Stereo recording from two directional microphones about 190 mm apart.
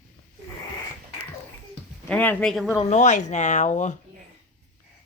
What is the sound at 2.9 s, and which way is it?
Speech, 40° left (ahead or behind).